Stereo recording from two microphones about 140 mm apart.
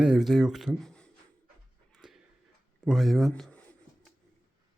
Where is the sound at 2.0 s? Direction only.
5° right (ahead or behind).